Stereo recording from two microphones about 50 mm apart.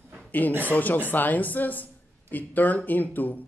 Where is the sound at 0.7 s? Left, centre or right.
Left.